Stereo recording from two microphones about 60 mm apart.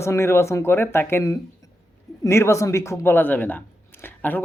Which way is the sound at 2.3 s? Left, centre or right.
Left.